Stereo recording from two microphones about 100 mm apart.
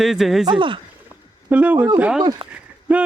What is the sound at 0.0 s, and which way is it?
Speech, centre (ahead or behind).